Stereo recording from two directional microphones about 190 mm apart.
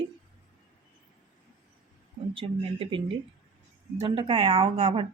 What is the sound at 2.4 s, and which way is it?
Speech, 25° right (ahead or behind).